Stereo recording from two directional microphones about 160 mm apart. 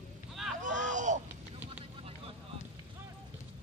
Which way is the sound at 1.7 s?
40° right (ahead or behind).